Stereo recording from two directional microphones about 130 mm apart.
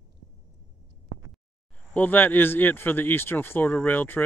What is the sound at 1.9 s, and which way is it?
Speech, 15° left (ahead or behind).